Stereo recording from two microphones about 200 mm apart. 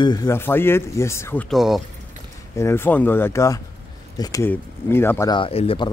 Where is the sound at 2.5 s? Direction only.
10° left (ahead or behind).